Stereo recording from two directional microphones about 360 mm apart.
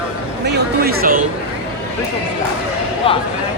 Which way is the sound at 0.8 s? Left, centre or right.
Right.